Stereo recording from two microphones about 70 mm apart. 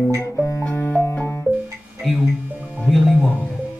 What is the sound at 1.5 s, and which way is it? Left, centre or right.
Music, right.